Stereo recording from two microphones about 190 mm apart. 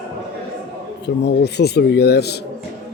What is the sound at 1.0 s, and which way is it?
Speech, 60° left (ahead or behind).